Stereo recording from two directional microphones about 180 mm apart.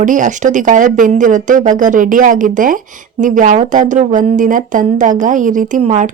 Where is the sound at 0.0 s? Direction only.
45° right (ahead or behind).